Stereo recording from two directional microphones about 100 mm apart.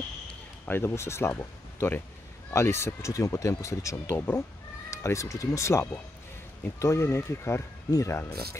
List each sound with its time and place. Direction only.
0.7 s speech: 25° left (ahead or behind)